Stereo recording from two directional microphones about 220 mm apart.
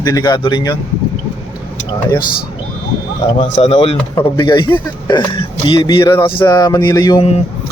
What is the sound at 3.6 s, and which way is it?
Speech, 30° left (ahead or behind).